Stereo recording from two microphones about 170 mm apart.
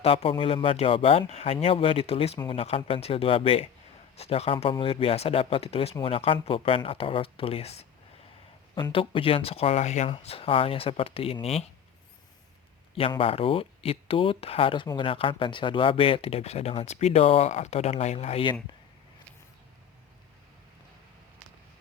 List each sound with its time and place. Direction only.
0.0 s speech: 35° left (ahead or behind)
13.0 s speech: 30° left (ahead or behind)